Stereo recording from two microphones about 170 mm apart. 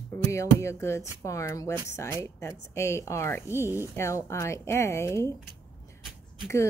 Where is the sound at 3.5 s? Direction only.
15° right (ahead or behind).